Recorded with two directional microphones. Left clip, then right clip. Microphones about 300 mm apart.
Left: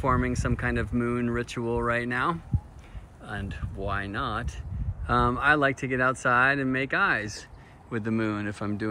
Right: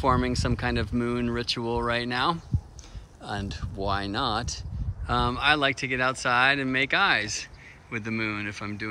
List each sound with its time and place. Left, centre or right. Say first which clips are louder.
0.0 s speech: right 2 dB; centre